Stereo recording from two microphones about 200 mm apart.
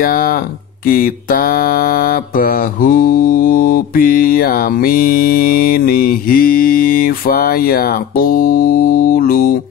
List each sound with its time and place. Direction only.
0.0 s mantra: 45° left (ahead or behind)